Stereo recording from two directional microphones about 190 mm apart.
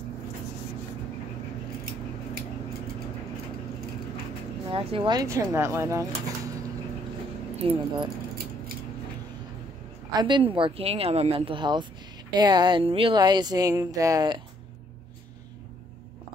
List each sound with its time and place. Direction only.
4.6 s speech: 30° right (ahead or behind)
7.5 s speech: 30° right (ahead or behind)
10.1 s speech: 25° right (ahead or behind)